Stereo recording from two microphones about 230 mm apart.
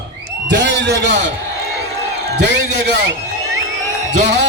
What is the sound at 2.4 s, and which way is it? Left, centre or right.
Speech, right.